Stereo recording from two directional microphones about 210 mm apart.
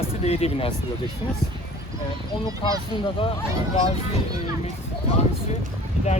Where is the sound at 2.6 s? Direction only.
25° left (ahead or behind).